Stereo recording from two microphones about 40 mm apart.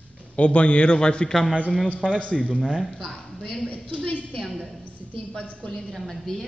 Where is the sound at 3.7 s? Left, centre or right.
Left.